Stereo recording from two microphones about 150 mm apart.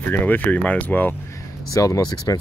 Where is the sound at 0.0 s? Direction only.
10° left (ahead or behind).